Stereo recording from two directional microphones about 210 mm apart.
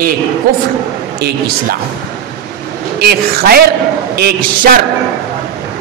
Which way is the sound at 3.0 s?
45° right (ahead or behind).